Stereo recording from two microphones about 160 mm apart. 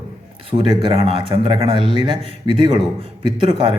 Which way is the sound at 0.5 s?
30° right (ahead or behind).